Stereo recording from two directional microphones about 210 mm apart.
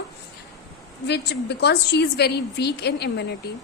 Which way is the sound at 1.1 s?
55° left (ahead or behind).